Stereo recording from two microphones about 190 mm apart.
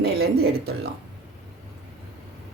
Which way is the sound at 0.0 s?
55° right (ahead or behind).